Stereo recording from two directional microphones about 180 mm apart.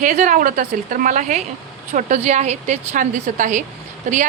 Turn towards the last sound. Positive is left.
turn(degrees=-45)  # may be behind; listen again after turning